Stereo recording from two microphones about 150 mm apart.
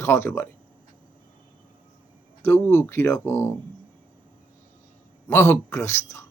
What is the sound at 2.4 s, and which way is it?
A man's voice, 15° left (ahead or behind).